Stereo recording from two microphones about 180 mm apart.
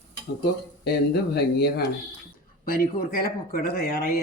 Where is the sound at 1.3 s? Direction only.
65° left (ahead or behind).